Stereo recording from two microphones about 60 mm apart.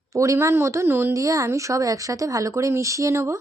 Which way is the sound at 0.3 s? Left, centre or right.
Right.